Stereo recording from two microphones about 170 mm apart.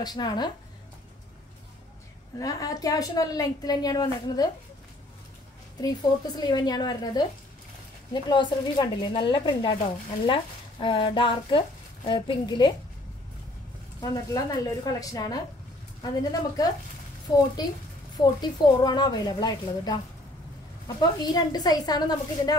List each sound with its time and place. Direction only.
0.0 s a woman's voice: 25° left (ahead or behind)
2.3 s a woman's voice: 20° left (ahead or behind)
5.8 s a woman's voice: 25° left (ahead or behind)
14.0 s a woman's voice: 20° left (ahead or behind)
21.0 s a woman's voice: 25° left (ahead or behind)